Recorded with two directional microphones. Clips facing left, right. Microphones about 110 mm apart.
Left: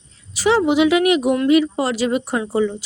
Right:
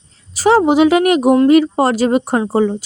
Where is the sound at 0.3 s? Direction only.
40° right (ahead or behind).